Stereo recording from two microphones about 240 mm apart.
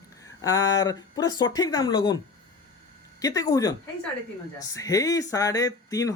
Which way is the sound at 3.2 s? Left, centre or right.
Centre.